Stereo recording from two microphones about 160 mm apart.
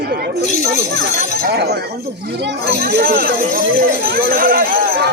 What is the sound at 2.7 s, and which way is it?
Speech, 90° right.